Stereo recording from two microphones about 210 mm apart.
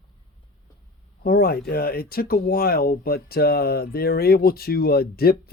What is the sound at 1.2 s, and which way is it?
Speech, 45° left (ahead or behind).